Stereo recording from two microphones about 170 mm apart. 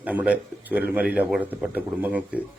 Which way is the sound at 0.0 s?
10° right (ahead or behind).